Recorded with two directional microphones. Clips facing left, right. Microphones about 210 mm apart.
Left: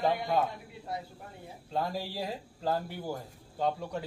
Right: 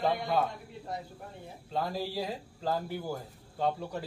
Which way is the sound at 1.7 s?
Centre (ahead or behind).